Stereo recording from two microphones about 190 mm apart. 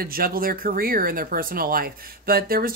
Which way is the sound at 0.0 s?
50° right (ahead or behind).